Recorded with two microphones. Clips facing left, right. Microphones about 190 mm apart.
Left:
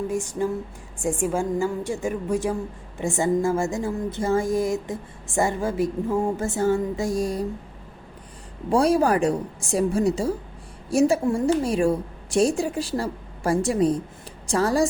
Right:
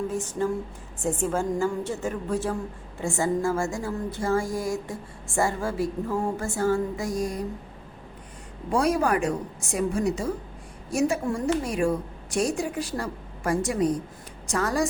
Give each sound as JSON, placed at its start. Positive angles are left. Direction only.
{"t": 0.1, "sound": "a woman's voice", "side_deg": 10}
{"t": 8.7, "sound": "a woman's voice", "side_deg": 30}